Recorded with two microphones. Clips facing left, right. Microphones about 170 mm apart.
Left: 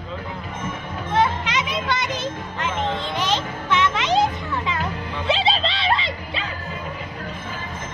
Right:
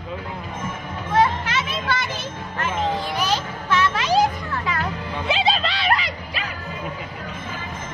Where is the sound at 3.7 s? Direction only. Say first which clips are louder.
Even; 20° left (ahead or behind).